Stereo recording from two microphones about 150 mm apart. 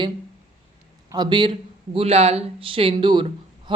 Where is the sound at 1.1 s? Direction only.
30° right (ahead or behind).